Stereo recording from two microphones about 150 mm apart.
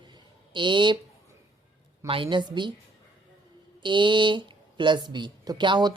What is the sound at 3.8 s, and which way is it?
Speech, 30° right (ahead or behind).